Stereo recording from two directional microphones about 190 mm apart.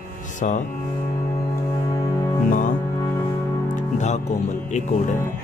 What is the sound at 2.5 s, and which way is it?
Mantra, 45° left (ahead or behind).